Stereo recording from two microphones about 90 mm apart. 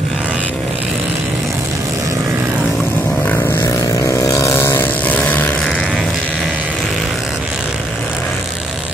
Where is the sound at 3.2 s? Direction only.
25° left (ahead or behind).